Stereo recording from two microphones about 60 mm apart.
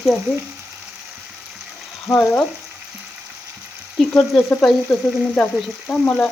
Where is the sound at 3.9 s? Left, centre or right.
Centre.